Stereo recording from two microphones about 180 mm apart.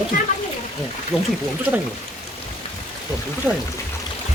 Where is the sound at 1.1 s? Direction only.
Centre (ahead or behind).